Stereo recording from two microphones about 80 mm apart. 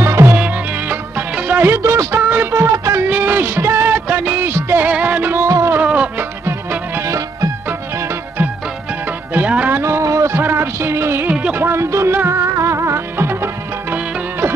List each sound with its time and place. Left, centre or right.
0.0 s music: right
0.4 s music: centre
1.7 s music of bollywood: right
2.5 s a sound: right
3.1 s music: right
5.5 s music: right
5.8 s music: centre
7.1 s music: right
9.3 s music: centre
9.8 s a sound: right
10.4 s music: right
11.2 s music: centre
11.6 s music: right